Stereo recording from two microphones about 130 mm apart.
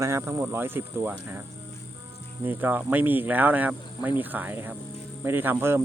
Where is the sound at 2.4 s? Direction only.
15° right (ahead or behind).